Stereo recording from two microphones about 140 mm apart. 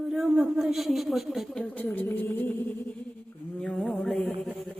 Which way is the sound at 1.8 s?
10° left (ahead or behind).